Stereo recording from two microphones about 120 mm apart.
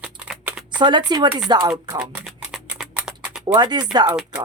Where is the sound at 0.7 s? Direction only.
40° right (ahead or behind).